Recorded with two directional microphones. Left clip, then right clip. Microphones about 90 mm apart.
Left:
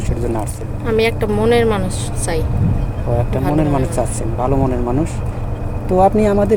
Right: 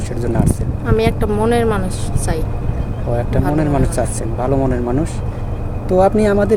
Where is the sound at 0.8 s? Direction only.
30° right (ahead or behind).